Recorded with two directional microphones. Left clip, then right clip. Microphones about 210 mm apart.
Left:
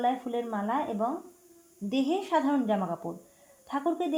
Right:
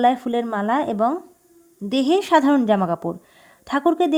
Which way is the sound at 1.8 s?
40° right (ahead or behind).